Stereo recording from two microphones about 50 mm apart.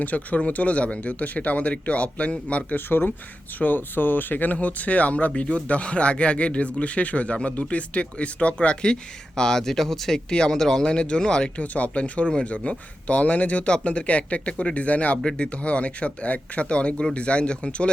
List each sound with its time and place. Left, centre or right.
0.0 s speech: left
3.6 s speech: left
4.5 s speech: left